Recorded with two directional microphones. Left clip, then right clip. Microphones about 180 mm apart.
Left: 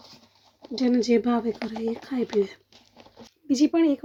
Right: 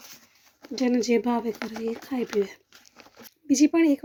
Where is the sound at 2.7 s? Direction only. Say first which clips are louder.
Right 1 dB; 55° right (ahead or behind).